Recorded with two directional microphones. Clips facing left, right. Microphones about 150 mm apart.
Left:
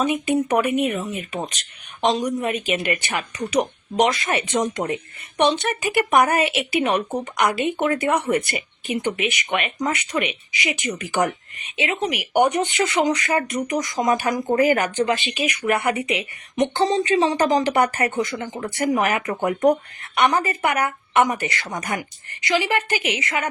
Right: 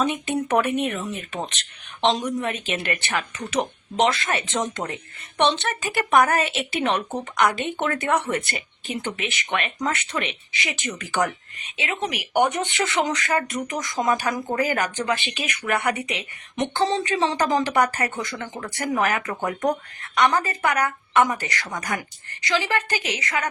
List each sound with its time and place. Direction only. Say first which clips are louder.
0.0 s a woman's voice: left 3 dB; 10° left (ahead or behind)